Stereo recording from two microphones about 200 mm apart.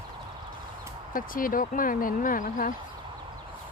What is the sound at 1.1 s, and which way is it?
Speech, 45° left (ahead or behind).